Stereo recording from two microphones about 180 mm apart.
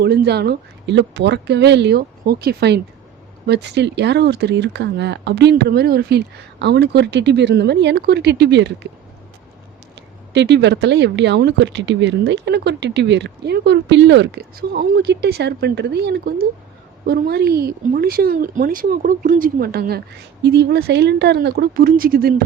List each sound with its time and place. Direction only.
0.0 s speech: 65° right (ahead or behind)
10.3 s a woman's voice: 75° right (ahead or behind); by 20.0 s 55° right (ahead or behind)
20.4 s a woman's voice: 70° right (ahead or behind)